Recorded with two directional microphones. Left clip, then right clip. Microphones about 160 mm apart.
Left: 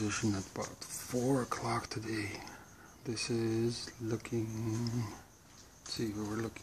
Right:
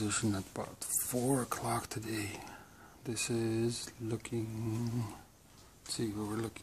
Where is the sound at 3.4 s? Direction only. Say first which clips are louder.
Left 1 dB; 25° right (ahead or behind).